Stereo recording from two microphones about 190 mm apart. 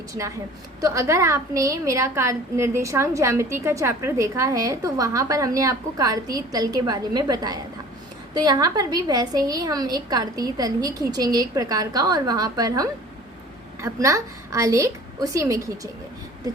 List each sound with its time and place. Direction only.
0.8 s a woman's voice: 15° right (ahead or behind)